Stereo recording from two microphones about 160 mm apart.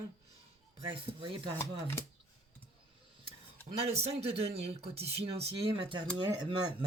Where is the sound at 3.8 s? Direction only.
40° right (ahead or behind).